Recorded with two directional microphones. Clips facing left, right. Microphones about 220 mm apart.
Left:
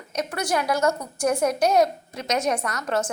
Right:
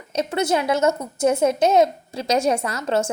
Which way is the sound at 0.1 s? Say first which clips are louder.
Right 5 dB; 25° right (ahead or behind).